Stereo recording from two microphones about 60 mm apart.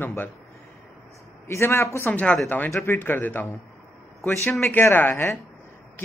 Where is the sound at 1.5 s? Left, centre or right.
Left.